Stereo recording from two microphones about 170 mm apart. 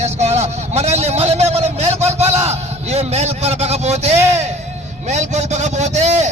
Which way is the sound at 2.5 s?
35° right (ahead or behind).